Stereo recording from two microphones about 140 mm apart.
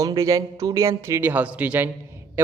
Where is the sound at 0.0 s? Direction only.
25° right (ahead or behind).